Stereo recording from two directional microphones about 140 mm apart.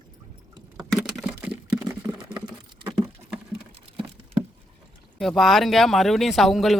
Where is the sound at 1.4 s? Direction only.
10° right (ahead or behind).